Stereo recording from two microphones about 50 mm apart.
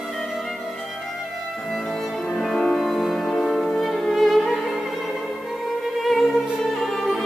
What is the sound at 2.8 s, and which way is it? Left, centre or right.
Music, centre.